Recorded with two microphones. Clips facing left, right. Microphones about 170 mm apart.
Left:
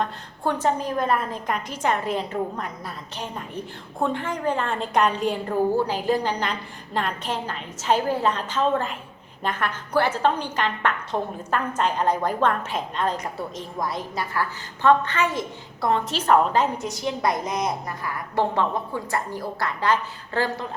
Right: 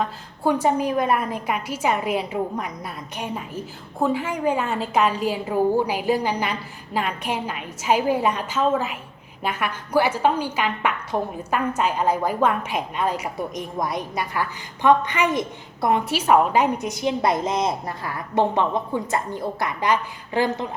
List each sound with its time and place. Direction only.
0.0 s a woman's voice: 10° right (ahead or behind)